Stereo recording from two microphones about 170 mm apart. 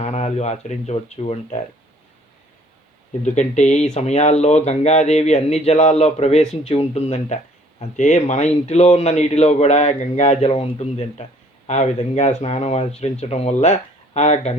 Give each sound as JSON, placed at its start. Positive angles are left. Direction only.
{"t": 0.0, "sound": "speech", "side_deg": 40}
{"t": 3.2, "sound": "speech", "side_deg": 45}